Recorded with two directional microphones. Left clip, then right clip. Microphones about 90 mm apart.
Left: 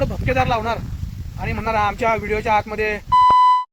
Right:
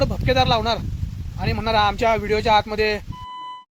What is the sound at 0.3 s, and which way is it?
Speech, 30° right (ahead or behind).